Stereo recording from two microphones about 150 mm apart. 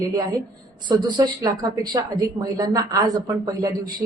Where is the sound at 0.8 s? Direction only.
30° right (ahead or behind).